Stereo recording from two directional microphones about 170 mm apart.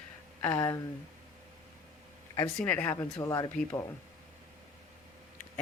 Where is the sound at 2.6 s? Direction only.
10° left (ahead or behind).